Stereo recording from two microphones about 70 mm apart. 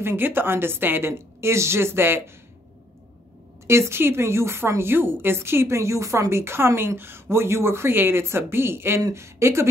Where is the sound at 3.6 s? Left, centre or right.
Right.